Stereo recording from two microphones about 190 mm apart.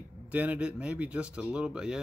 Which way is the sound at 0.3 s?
10° right (ahead or behind).